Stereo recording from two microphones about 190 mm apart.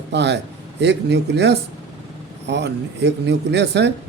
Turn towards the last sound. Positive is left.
turn(degrees=-65)  # may be behind; listen again after turning